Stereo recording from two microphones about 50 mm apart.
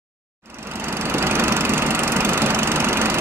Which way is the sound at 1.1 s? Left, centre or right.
Right.